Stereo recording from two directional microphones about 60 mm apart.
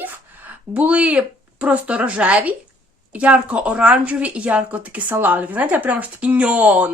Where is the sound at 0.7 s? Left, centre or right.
Right.